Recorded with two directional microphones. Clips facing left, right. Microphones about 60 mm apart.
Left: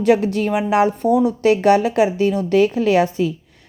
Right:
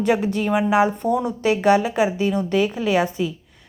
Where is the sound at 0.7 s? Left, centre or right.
Centre.